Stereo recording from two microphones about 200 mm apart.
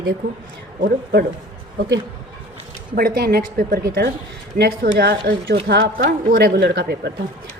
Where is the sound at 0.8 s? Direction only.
45° right (ahead or behind).